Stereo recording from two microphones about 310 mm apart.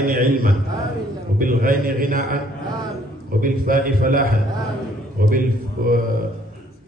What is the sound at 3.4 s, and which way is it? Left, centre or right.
A man's voice, right.